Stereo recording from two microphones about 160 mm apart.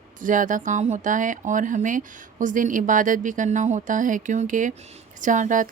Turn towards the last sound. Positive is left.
turn(degrees=-50)  # may be behind; listen again after turning